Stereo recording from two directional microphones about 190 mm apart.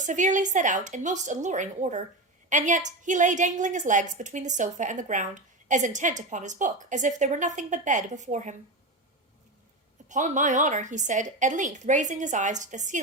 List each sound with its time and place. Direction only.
0.0 s a woman's voice: 40° right (ahead or behind)
10.1 s a woman's voice: 40° right (ahead or behind)